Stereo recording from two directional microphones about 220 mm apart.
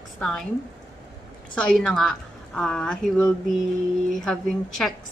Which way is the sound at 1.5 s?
5° left (ahead or behind).